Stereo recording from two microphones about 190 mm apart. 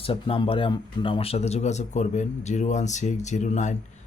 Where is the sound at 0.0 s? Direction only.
30° left (ahead or behind).